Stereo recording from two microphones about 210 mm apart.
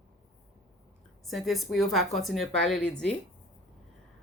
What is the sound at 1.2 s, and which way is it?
Speech, centre (ahead or behind).